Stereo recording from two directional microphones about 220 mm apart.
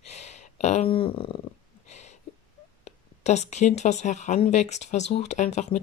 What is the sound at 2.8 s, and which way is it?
Speech, 30° left (ahead or behind).